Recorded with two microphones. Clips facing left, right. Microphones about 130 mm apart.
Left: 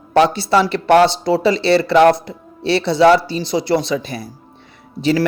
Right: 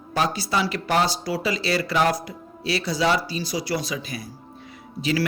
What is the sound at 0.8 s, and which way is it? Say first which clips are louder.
Speech: left 12 dB; 65° left (ahead or behind).